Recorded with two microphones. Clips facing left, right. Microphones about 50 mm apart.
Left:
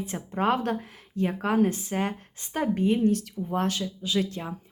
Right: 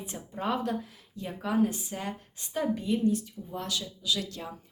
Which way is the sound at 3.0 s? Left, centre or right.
Left.